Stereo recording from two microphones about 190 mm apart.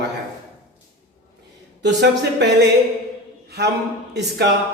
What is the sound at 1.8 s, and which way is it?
Speech, 65° right (ahead or behind).